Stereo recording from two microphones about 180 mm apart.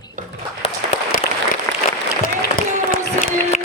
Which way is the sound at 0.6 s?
35° left (ahead or behind).